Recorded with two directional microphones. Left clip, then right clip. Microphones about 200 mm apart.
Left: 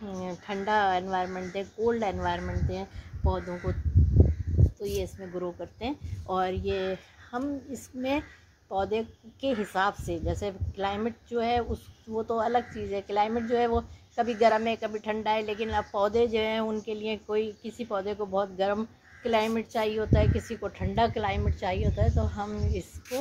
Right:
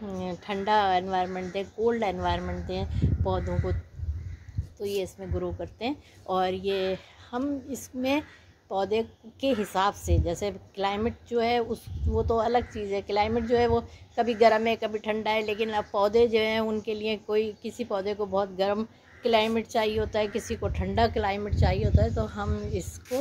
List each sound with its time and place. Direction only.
0.2 s speech: 20° right (ahead or behind)
4.7 s a woman's voice: 15° right (ahead or behind)